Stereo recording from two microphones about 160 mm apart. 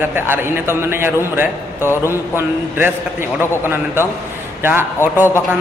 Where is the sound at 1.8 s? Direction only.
15° left (ahead or behind).